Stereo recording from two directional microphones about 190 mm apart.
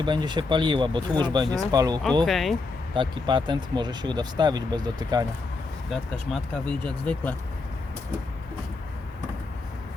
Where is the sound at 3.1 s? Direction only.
25° right (ahead or behind).